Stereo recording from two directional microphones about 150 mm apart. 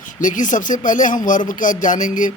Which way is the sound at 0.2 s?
60° left (ahead or behind).